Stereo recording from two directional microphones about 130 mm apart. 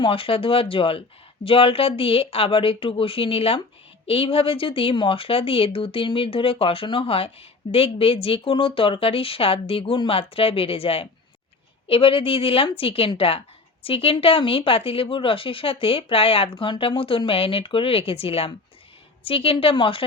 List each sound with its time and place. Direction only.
0.0 s a woman's voice: 45° left (ahead or behind)